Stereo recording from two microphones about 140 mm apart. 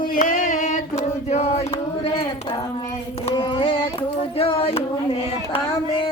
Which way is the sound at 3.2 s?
35° left (ahead or behind).